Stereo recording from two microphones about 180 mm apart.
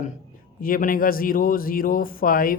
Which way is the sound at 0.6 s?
50° left (ahead or behind).